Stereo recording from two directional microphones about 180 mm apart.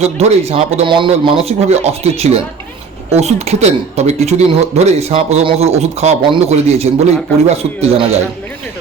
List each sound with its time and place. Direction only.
0.0 s speech: 35° right (ahead or behind)